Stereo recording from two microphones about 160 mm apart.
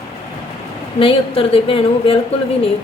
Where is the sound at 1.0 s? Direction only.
35° left (ahead or behind).